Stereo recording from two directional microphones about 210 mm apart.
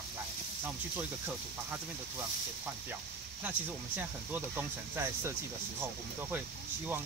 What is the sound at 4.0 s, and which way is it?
Speech, 10° right (ahead or behind).